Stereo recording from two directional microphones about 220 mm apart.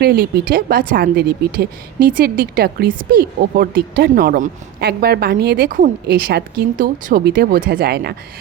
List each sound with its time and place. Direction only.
0.0 s speech: 45° right (ahead or behind)